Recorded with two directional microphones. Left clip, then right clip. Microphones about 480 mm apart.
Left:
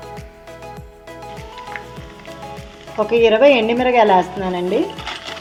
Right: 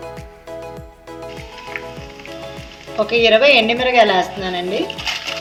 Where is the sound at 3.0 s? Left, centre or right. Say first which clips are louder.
Even; centre.